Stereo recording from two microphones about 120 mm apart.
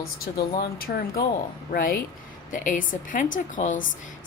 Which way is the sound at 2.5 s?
90° left.